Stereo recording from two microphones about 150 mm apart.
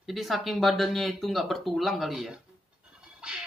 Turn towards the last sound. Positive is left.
turn(degrees=-5)  # may be behind; listen again after turning